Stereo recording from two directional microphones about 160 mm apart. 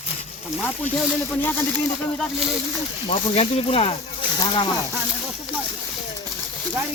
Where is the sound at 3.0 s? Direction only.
40° left (ahead or behind).